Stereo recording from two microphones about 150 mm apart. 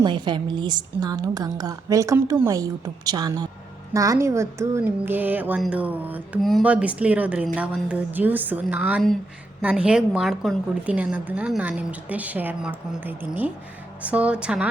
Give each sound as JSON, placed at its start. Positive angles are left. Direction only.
{"t": 0.0, "sound": "a woman's voice", "side_deg": -30}